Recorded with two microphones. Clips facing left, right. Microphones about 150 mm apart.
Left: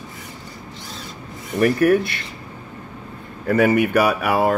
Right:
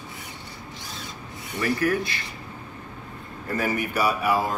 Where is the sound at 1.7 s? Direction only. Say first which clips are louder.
Left 8 dB; 60° left (ahead or behind).